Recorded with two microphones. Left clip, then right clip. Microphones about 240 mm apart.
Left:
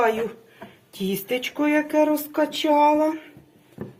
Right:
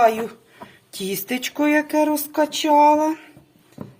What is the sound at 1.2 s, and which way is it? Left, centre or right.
Speech, right.